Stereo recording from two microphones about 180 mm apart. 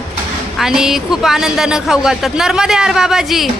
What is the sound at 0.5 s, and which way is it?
Speech, centre (ahead or behind).